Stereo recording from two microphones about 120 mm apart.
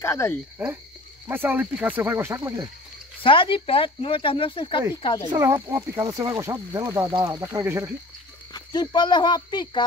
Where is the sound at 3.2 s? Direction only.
45° left (ahead or behind).